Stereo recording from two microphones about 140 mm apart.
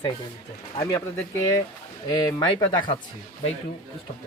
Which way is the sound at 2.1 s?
25° left (ahead or behind).